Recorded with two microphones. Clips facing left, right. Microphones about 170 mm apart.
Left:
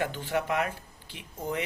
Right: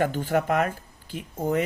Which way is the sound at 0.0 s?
45° right (ahead or behind).